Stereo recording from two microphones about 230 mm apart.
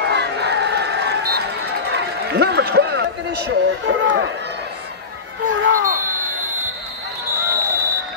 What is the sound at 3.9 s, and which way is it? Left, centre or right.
Run, right.